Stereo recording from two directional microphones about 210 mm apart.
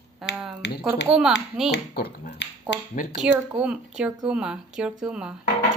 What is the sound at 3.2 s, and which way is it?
A woman's voice, 5° right (ahead or behind).